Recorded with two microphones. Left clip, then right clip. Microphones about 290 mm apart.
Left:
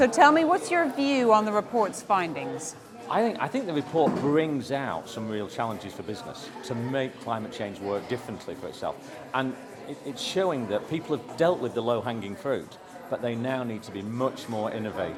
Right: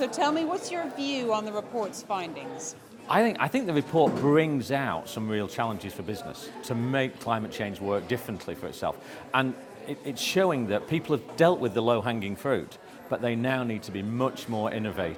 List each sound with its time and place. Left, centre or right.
0.0 s a woman's voice: left
3.1 s speech: right